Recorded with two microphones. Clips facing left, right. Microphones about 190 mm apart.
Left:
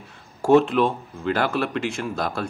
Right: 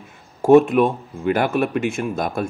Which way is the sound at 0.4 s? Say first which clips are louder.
Right 4 dB; 15° right (ahead or behind).